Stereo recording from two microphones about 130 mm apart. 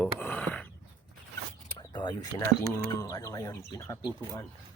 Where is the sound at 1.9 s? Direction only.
35° left (ahead or behind).